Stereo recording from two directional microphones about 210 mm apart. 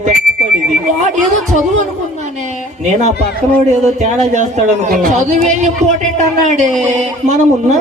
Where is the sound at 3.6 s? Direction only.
35° right (ahead or behind).